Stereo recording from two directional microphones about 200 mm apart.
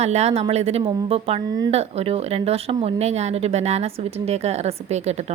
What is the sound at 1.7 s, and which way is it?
A woman's voice, 30° right (ahead or behind).